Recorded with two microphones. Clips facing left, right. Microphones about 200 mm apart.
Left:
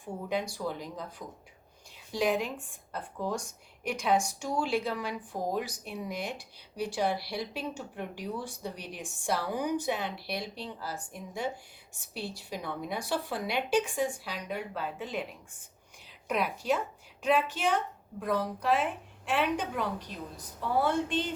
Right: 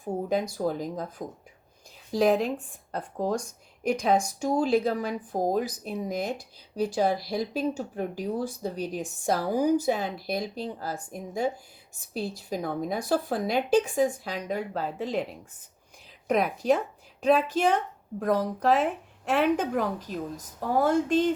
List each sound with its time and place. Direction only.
0.0 s a woman's voice: 45° right (ahead or behind)